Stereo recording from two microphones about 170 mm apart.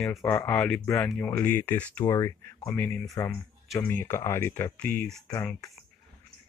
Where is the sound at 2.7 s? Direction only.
5° left (ahead or behind).